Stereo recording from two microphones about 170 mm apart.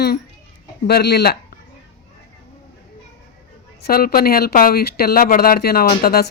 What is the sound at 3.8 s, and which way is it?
Speech, 60° left (ahead or behind).